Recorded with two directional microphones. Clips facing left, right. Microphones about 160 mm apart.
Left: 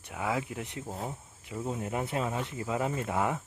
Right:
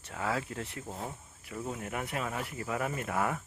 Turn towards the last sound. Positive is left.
turn(degrees=20)  # may be behind; listen again after turning